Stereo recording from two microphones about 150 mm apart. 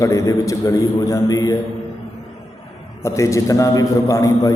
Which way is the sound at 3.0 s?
20° left (ahead or behind).